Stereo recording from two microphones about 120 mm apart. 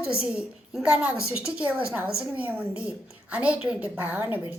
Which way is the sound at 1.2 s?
25° left (ahead or behind).